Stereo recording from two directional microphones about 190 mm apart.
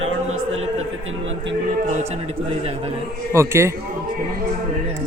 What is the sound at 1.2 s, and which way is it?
Music, 75° right (ahead or behind).